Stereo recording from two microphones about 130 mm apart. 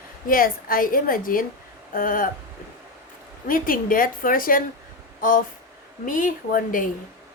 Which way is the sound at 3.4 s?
90° left.